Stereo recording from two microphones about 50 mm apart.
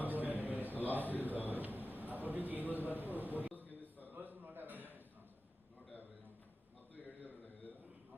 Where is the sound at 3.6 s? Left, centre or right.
Left.